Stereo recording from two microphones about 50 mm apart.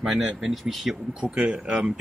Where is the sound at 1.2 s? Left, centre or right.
Right.